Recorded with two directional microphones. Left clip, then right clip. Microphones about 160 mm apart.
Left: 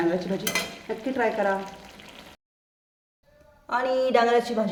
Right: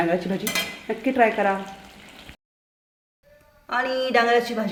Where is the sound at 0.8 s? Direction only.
40° right (ahead or behind).